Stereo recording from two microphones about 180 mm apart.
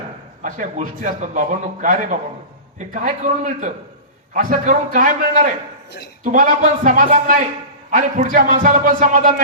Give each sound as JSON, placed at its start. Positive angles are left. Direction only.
{"t": 0.4, "sound": "a man's voice", "side_deg": -45}